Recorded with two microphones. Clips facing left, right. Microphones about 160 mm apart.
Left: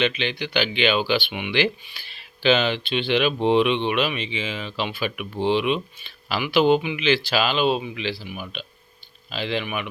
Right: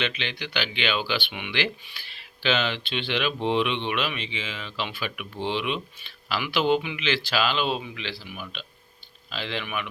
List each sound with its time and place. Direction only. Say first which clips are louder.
0.0 s speech: left 7 dB; 15° left (ahead or behind)